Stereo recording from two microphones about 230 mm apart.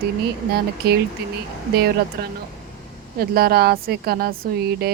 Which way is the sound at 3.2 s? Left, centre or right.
Right.